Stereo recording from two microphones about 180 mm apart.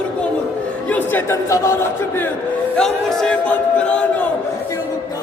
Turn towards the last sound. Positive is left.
turn(degrees=5)  # may be behind; listen again after turning